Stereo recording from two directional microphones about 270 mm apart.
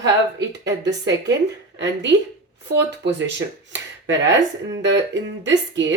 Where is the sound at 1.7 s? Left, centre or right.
Right.